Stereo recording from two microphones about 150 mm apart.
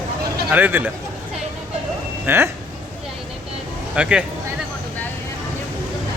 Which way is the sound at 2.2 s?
15° right (ahead or behind).